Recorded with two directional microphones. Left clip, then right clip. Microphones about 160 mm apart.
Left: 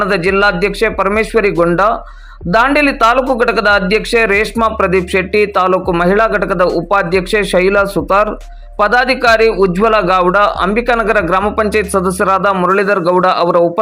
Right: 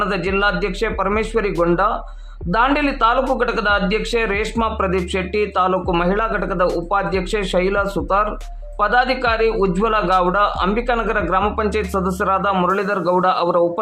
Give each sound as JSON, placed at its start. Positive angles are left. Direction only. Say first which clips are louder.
{"t": 0.0, "sound": "a man's voice", "louder": "left 7 dB", "side_deg": 30}